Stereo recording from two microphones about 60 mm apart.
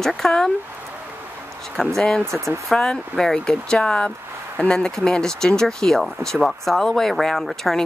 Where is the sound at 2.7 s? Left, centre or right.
Centre.